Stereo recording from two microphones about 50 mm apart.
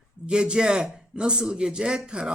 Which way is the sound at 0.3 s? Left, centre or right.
Centre.